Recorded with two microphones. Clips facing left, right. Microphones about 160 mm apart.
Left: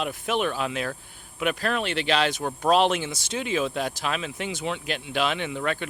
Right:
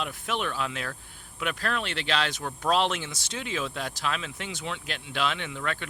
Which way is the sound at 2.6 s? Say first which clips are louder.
Left 5 dB; 10° left (ahead or behind).